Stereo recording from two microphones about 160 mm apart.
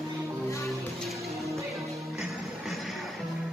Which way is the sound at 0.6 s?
Centre (ahead or behind).